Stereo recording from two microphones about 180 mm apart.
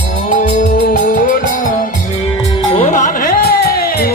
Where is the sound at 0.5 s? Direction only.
50° left (ahead or behind).